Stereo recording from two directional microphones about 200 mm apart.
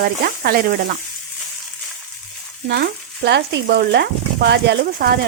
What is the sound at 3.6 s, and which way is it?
A woman's voice, 50° right (ahead or behind).